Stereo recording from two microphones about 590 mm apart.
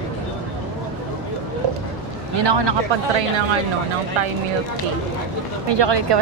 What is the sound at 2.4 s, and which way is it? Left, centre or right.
Speech, right.